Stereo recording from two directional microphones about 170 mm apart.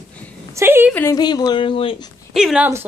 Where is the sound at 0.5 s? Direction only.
15° right (ahead or behind).